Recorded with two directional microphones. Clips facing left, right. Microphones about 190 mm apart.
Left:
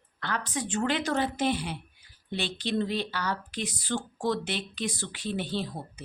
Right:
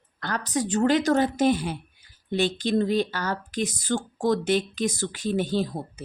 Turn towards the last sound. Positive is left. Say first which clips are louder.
# right 6 dB
turn(degrees=-40)  # may be behind; listen again after turning